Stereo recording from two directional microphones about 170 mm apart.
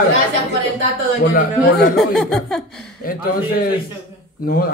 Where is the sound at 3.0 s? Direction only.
60° left (ahead or behind).